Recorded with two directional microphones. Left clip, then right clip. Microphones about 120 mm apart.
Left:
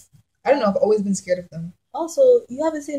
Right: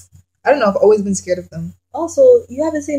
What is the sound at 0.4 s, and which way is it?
Speech, 15° right (ahead or behind).